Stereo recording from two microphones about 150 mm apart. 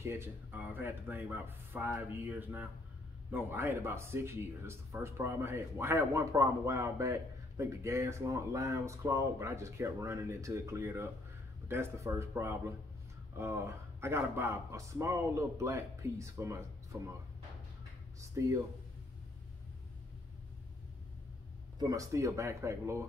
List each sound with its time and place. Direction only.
0.0 s speech: 15° right (ahead or behind)
18.2 s speech: 20° right (ahead or behind)
21.7 s speech: 25° right (ahead or behind)